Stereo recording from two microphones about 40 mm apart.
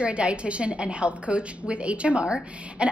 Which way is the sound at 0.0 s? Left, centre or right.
Right.